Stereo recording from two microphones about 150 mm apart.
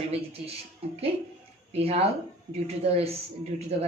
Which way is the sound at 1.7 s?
40° right (ahead or behind).